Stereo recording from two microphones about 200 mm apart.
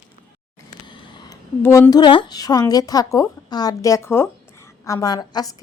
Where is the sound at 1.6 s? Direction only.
15° left (ahead or behind).